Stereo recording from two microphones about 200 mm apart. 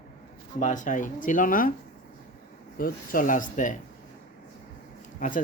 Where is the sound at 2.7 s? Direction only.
45° left (ahead or behind).